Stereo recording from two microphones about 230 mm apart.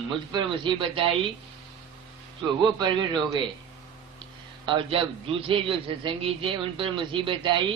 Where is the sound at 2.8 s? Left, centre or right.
Centre.